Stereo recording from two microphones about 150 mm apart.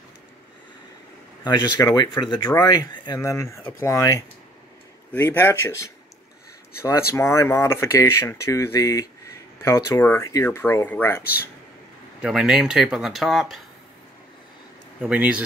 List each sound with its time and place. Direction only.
1.4 s speech: 30° left (ahead or behind)
12.2 s speech: 5° right (ahead or behind)
15.0 s speech: 10° right (ahead or behind)